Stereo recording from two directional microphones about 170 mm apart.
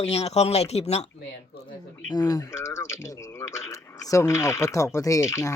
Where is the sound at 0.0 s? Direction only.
35° left (ahead or behind).